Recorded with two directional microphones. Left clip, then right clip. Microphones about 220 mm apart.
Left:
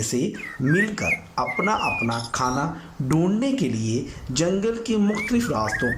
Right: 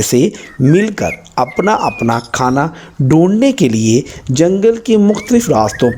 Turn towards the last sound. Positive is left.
turn(degrees=-35)  # may be behind; listen again after turning